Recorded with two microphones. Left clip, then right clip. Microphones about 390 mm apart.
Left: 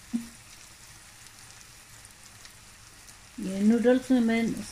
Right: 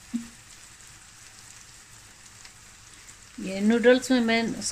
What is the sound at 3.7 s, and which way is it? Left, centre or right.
Speech, right.